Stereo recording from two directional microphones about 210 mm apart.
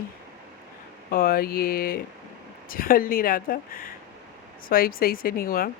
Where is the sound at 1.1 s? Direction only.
45° left (ahead or behind).